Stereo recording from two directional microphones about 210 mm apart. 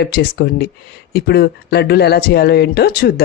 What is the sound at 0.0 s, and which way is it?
Speech, 50° left (ahead or behind).